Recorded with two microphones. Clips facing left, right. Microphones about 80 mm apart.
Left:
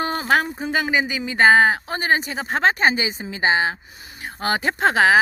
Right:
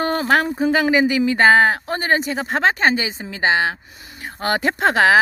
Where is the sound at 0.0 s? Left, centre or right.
Right.